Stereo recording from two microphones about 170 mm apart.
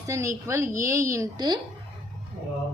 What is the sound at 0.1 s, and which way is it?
A woman's voice, 20° right (ahead or behind).